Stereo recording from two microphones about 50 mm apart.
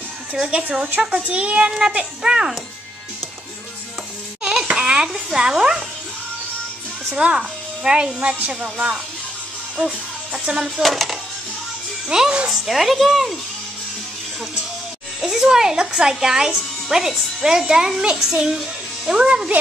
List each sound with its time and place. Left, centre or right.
0.5 s a child's voice: right
1.7 s speech: centre
4.4 s music: centre
7.3 s a child's voice: centre
9.8 s music: centre
10.8 s a woman's voice: centre
12.1 s speech: centre
12.6 s a woman's voice: centre
15.2 s a child's voice: centre